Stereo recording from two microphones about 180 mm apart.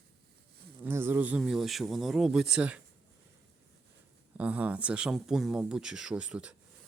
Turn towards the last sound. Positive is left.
turn(degrees=-5)  # may be behind; listen again after turning